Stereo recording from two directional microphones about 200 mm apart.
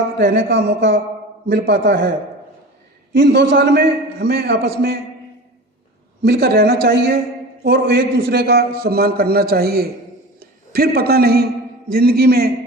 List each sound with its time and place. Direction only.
0.2 s a man's voice: 50° right (ahead or behind)
3.2 s a man's voice: 55° right (ahead or behind)
6.2 s a man's voice: 50° right (ahead or behind)